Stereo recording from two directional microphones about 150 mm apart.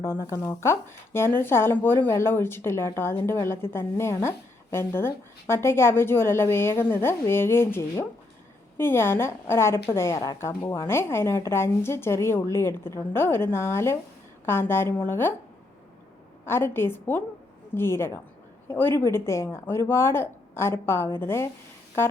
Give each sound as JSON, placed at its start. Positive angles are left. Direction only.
{"t": 0.0, "sound": "speech", "side_deg": 15}
{"t": 16.5, "sound": "speech", "side_deg": 15}